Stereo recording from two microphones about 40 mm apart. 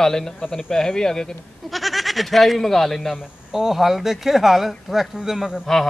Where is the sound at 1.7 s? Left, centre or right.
Centre.